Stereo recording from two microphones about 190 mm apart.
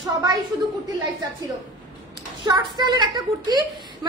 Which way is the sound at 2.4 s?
20° right (ahead or behind).